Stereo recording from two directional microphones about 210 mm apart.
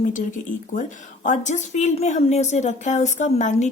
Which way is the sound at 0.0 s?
40° left (ahead or behind).